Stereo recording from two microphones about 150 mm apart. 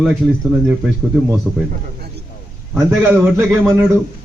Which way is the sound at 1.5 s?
Centre (ahead or behind).